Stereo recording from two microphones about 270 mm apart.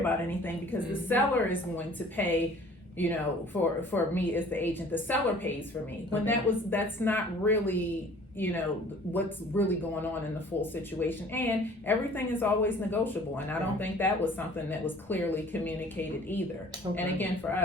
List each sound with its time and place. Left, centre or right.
0.0 s a woman's voice: centre